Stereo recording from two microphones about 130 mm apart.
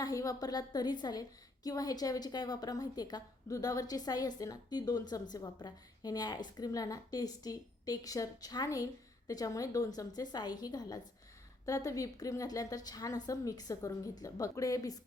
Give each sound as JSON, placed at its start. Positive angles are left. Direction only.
{"t": 0.0, "sound": "a woman's voice", "side_deg": 25}